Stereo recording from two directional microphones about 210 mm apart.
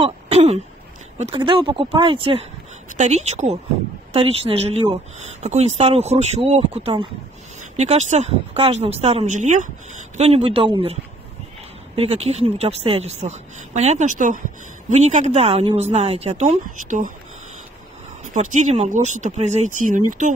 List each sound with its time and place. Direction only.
0.0 s throat clearing: 30° right (ahead or behind)
1.1 s a woman's voice: 30° right (ahead or behind)
18.3 s speech: 35° right (ahead or behind)